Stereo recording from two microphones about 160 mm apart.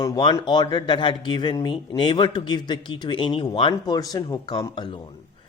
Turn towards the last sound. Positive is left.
turn(degrees=25)  # may be behind; listen again after turning